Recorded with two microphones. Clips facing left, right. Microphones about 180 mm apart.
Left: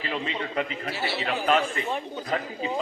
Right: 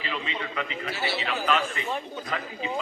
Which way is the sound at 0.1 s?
40° left (ahead or behind).